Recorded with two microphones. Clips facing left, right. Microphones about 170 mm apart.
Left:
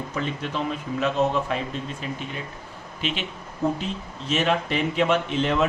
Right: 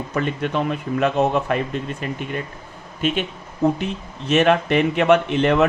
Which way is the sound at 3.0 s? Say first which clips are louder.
Right 7 dB; 50° right (ahead or behind).